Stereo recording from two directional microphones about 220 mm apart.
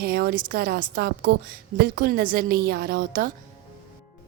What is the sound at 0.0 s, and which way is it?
A woman's voice, 45° right (ahead or behind).